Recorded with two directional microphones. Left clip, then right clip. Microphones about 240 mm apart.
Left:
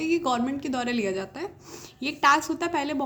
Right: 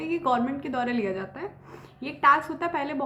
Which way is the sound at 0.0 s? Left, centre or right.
Left.